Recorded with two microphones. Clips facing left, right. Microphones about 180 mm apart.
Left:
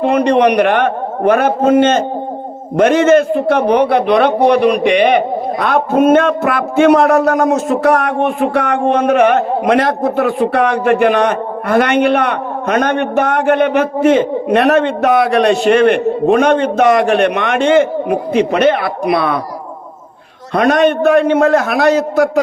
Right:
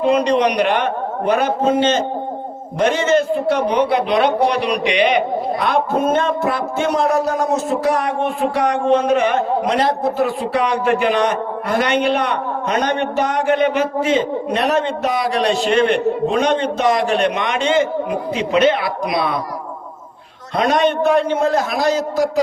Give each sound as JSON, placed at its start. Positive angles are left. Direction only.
{"t": 0.0, "sound": "a man's voice", "side_deg": 60}
{"t": 20.5, "sound": "a man's voice", "side_deg": 60}